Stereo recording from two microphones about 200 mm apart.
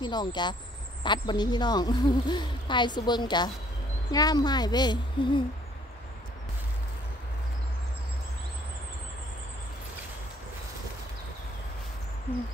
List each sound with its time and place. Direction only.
0.0 s speech: 20° left (ahead or behind)